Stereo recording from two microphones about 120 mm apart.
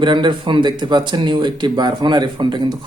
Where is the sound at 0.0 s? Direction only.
40° right (ahead or behind).